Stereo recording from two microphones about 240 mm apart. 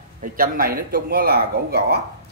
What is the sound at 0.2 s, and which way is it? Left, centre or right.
Speech, right.